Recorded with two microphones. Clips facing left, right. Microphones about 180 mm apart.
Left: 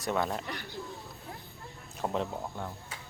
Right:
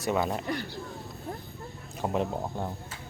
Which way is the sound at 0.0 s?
5° right (ahead or behind).